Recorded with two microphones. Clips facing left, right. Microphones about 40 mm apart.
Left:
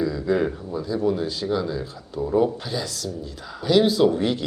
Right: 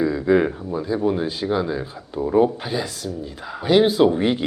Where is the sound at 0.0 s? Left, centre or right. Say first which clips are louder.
Right 4 dB; right.